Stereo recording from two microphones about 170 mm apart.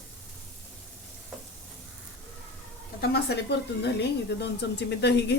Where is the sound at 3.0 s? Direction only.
75° left (ahead or behind).